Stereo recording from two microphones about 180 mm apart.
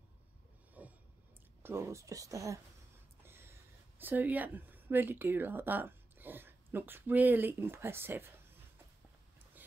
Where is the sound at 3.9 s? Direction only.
10° right (ahead or behind).